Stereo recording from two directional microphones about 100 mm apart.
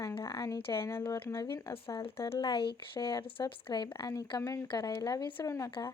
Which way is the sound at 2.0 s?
65° left (ahead or behind).